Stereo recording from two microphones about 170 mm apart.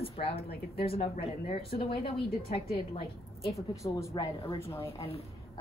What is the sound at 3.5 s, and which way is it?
A woman's voice, 15° left (ahead or behind).